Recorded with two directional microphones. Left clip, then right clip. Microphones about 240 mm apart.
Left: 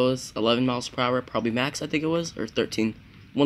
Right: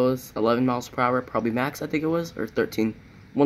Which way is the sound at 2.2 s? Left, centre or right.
Centre.